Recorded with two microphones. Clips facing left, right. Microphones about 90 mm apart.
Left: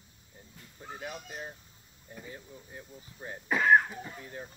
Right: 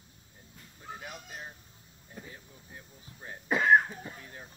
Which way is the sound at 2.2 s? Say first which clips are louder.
Left 4 dB; 5° left (ahead or behind).